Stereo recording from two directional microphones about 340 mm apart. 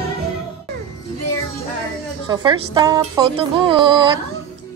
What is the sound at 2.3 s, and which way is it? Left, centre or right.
A woman's voice, centre.